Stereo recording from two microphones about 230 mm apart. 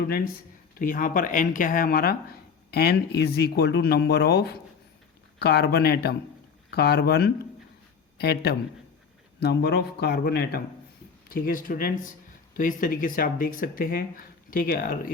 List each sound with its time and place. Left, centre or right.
0.8 s speech: left